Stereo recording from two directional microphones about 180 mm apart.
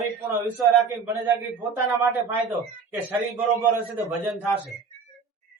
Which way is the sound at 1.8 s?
15° right (ahead or behind).